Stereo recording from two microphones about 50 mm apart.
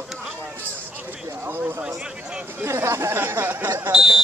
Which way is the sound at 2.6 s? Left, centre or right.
Right.